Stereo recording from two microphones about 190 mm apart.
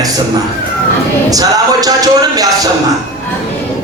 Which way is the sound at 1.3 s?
20° right (ahead or behind).